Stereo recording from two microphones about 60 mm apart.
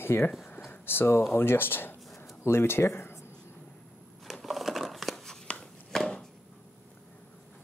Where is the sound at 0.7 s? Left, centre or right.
Left.